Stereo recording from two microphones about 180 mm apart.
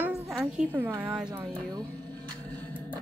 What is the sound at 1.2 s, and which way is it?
Speech, 20° right (ahead or behind).